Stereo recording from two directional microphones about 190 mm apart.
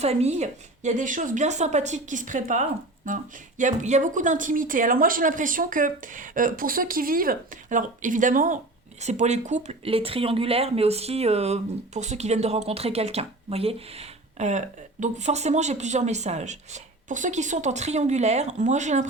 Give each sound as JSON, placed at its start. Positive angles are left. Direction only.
{"t": 0.0, "sound": "speech", "side_deg": -35}